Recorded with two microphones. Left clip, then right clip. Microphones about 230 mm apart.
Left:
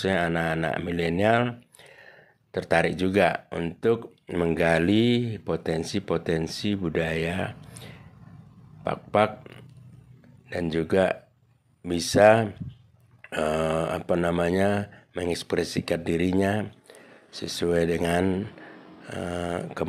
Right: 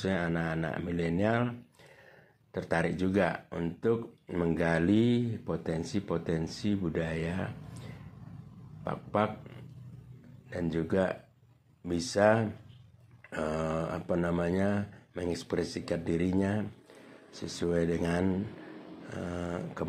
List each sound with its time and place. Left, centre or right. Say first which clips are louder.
0.0 s speech: left 8 dB; left
2.5 s speech: left 8 dB; left
10.5 s speech: left 7 dB; left